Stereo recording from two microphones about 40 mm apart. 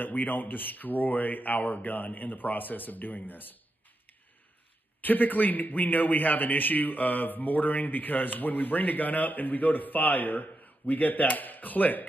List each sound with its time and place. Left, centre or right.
0.0 s a man's voice: left
5.0 s a man's voice: left